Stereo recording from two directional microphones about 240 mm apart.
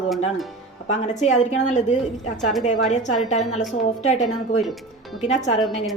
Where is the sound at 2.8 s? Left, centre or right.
Left.